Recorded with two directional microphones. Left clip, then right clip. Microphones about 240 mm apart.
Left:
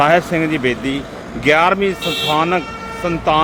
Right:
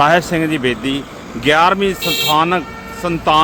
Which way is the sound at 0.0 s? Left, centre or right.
Centre.